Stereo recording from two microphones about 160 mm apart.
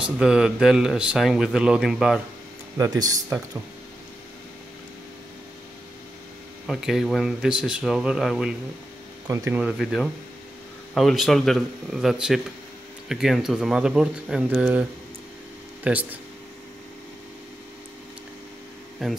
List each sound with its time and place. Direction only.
0.0 s speech: 5° right (ahead or behind)
2.8 s speech: 20° right (ahead or behind)
6.7 s speech: centre (ahead or behind)
9.3 s speech: 15° right (ahead or behind)
9.6 s speech: centre (ahead or behind)
19.0 s speech: centre (ahead or behind)